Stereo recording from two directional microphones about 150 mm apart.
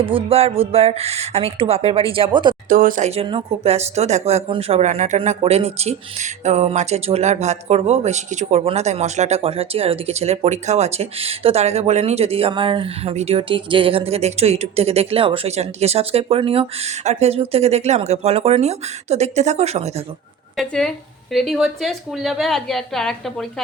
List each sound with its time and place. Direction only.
0.0 s speech: 35° right (ahead or behind)
2.6 s speech: 65° right (ahead or behind)
3.2 s speech: 35° right (ahead or behind)
4.8 s speech: 50° right (ahead or behind)
20.6 s a woman's voice: centre (ahead or behind)